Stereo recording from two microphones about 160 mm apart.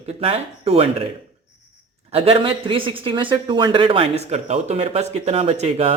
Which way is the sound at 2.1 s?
35° right (ahead or behind).